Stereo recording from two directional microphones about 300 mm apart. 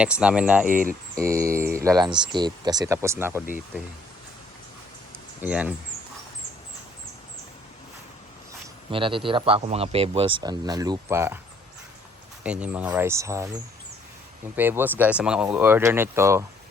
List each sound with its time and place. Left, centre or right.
0.0 s speech: centre
0.7 s speech: right
1.2 s speech: centre
5.4 s speech: centre
8.9 s speech: centre
12.4 s speech: centre